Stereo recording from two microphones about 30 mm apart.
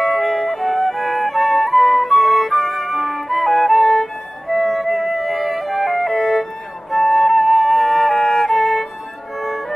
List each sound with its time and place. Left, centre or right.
0.0 s music: centre
8.3 s music: centre
8.5 s music: centre